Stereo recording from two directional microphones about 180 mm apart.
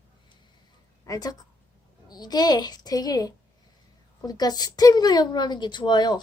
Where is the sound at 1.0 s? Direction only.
20° left (ahead or behind).